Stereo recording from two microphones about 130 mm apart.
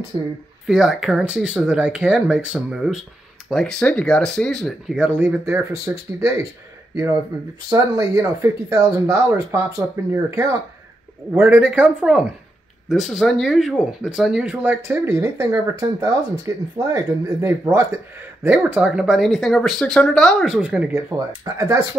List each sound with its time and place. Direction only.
0.1 s speech: 40° right (ahead or behind)
0.7 s speech: 5° right (ahead or behind); by 6.4 s 20° right (ahead or behind)
7.7 s speech: 25° right (ahead or behind)
11.3 s speech: 15° right (ahead or behind)
18.7 s speech: 10° right (ahead or behind)
20.9 s speech: 25° right (ahead or behind)